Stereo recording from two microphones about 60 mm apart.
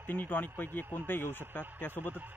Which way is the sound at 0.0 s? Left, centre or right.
Left.